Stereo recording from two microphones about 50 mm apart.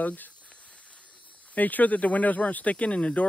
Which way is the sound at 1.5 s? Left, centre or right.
Left.